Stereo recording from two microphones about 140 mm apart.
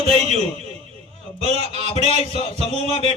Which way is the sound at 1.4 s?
50° right (ahead or behind).